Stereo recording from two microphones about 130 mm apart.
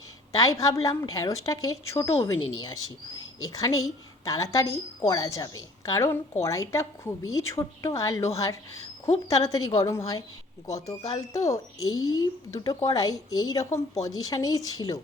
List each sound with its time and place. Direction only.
0.3 s speech: 25° left (ahead or behind)